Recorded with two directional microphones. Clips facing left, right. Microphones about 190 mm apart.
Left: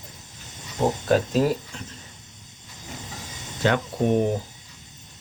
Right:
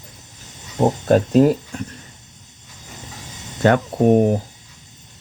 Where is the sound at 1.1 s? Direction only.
45° right (ahead or behind).